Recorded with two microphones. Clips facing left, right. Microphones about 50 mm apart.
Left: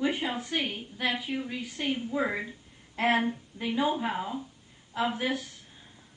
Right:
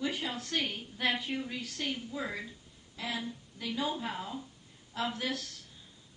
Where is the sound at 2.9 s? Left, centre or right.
Left.